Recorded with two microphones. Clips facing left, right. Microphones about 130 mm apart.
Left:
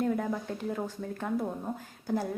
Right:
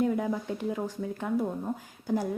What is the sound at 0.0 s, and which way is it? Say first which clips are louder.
A woman's voice: right 2 dB; 10° right (ahead or behind).